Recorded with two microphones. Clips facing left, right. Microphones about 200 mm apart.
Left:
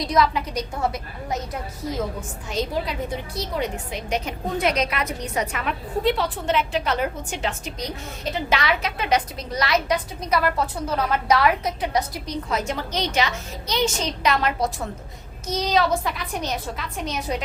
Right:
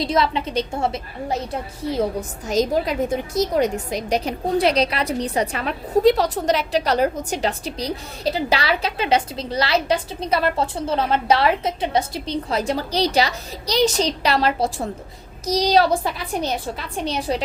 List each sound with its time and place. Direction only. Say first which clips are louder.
0.0 s a woman's voice: right 1 dB; 25° right (ahead or behind)
2.5 s a woman's voice: right 6 dB; 45° right (ahead or behind)